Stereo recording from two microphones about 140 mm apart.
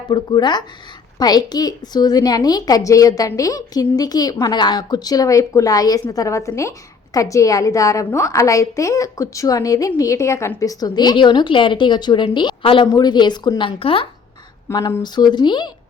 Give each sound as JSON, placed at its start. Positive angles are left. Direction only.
{"t": 0.1, "sound": "a woman's voice", "side_deg": 30}
{"t": 14.7, "sound": "speech", "side_deg": 25}